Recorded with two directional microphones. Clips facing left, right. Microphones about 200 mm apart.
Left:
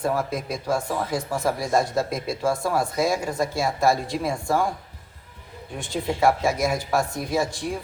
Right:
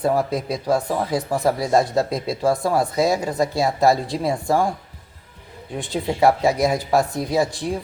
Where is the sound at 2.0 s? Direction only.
35° right (ahead or behind).